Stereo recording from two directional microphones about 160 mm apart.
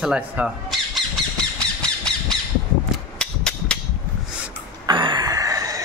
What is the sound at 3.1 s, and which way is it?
Cap gun, 5° left (ahead or behind).